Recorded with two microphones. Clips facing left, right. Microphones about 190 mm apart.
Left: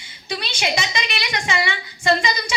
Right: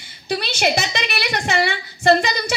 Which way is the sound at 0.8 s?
60° right (ahead or behind).